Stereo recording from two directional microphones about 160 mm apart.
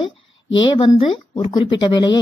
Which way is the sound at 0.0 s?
30° left (ahead or behind).